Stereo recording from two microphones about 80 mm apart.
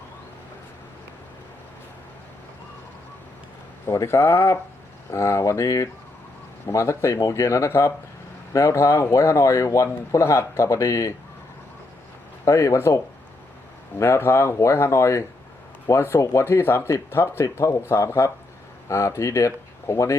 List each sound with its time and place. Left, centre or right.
3.8 s speech: left
12.5 s speech: left
14.0 s speech: left